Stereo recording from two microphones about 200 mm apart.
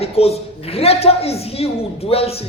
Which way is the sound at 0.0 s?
30° left (ahead or behind).